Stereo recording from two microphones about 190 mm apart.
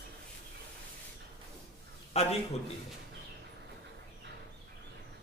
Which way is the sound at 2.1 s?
35° left (ahead or behind).